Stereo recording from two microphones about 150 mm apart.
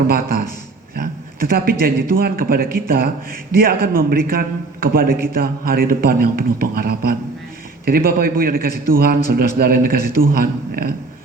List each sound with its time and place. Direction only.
0.9 s a man's voice: 85° right